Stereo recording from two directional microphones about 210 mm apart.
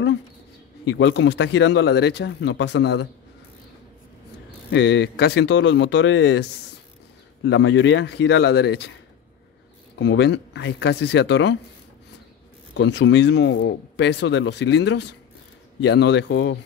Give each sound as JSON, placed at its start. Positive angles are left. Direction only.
{"t": 0.8, "sound": "speech", "side_deg": 60}
{"t": 4.6, "sound": "speech", "side_deg": 60}
{"t": 7.4, "sound": "speech", "side_deg": 55}
{"t": 9.9, "sound": "speech", "side_deg": 55}
{"t": 12.7, "sound": "speech", "side_deg": 55}